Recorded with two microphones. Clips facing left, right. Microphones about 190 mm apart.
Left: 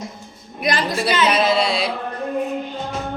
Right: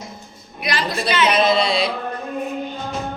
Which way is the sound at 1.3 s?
5° left (ahead or behind).